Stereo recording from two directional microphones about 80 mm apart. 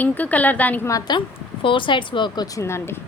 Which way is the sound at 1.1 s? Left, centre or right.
Left.